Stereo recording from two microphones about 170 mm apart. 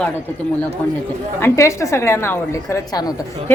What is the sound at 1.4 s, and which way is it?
A woman's voice, 15° left (ahead or behind).